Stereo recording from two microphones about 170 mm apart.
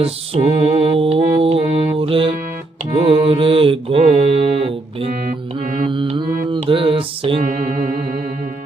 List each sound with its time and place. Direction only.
0.0 s mantra: 35° right (ahead or behind)